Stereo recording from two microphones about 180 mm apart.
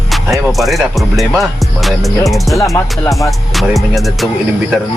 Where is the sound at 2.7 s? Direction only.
15° left (ahead or behind).